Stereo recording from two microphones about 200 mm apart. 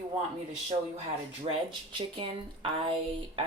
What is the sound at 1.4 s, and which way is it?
Speech, 25° right (ahead or behind).